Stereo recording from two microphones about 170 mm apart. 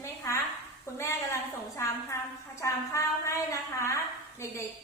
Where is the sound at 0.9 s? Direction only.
15° left (ahead or behind).